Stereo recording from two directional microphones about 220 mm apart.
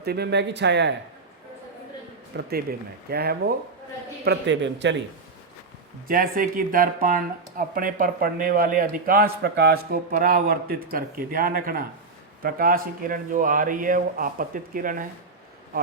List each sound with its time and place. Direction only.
0.0 s speech: 45° right (ahead or behind)
2.3 s a man's voice: 45° right (ahead or behind)
6.1 s speech: 40° right (ahead or behind)